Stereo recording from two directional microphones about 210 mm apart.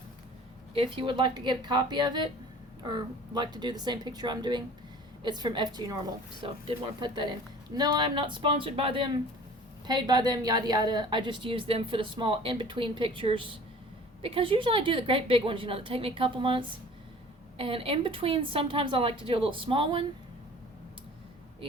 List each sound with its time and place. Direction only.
0.7 s a woman's voice: 25° right (ahead or behind)